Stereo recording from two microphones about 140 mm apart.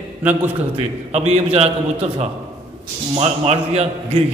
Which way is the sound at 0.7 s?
50° right (ahead or behind).